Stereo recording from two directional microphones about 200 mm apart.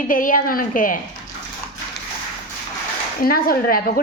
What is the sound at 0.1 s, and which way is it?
Speech, 45° left (ahead or behind).